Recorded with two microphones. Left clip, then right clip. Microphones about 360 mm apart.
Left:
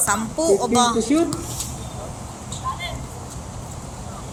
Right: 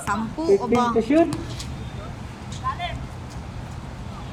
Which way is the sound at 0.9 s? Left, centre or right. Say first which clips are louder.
Right 1 dB; right.